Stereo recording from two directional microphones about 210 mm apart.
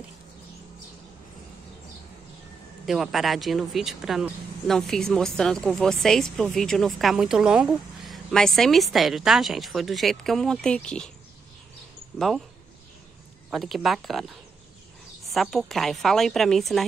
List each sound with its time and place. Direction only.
2.9 s speech: centre (ahead or behind)
12.2 s speech: centre (ahead or behind)
13.5 s speech: centre (ahead or behind)